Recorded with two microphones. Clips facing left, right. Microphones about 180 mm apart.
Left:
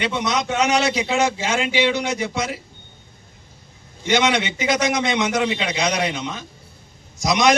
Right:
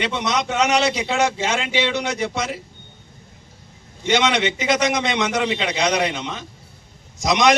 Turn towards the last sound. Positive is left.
turn(degrees=0)  # may be behind; listen again after turning